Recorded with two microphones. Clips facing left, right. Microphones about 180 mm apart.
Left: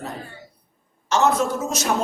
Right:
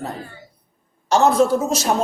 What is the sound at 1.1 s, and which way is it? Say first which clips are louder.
Speech: right 5 dB; 35° right (ahead or behind).